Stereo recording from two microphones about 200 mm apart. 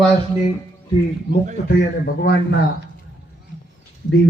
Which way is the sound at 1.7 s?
55° left (ahead or behind).